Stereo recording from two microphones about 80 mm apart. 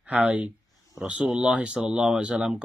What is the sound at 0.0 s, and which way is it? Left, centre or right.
Speech, centre.